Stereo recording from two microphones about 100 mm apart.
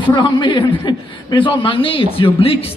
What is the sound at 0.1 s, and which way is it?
A man's voice, 50° left (ahead or behind).